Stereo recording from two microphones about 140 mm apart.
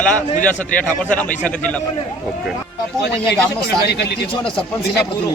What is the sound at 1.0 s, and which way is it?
Speech, 10° left (ahead or behind).